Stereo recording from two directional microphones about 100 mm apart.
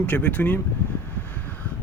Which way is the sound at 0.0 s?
15° left (ahead or behind).